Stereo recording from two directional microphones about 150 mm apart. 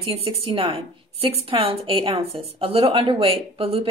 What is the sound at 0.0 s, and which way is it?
A woman's voice, 40° right (ahead or behind).